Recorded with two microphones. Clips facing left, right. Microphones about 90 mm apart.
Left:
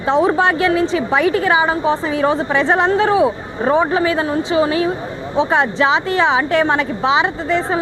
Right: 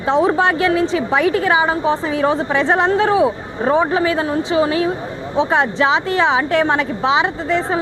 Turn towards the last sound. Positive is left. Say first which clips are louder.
# left 1 dB
turn(degrees=25)  # may be behind; listen again after turning